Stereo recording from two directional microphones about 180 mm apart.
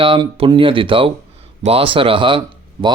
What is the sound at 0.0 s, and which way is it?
Speech, 30° right (ahead or behind).